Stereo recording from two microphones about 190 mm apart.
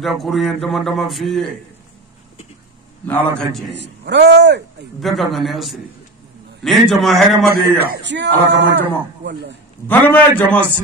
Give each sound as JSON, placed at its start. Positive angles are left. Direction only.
{"t": 0.0, "sound": "speech", "side_deg": 0}
{"t": 3.1, "sound": "a man's voice", "side_deg": 5}
{"t": 3.8, "sound": "speech", "side_deg": -65}
{"t": 5.0, "sound": "speech", "side_deg": 0}
{"t": 7.8, "sound": "speech", "side_deg": -60}
{"t": 9.8, "sound": "a man's voice", "side_deg": 10}